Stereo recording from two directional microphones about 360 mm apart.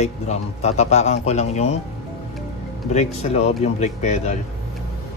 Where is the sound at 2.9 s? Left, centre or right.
Centre.